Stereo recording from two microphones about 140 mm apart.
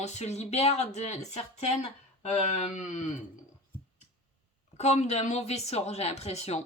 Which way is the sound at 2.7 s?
60° left (ahead or behind).